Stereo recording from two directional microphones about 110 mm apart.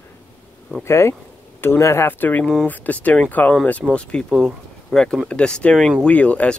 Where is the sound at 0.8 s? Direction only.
25° left (ahead or behind).